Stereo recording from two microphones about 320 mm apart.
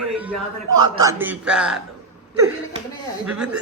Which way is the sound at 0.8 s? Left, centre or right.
Centre.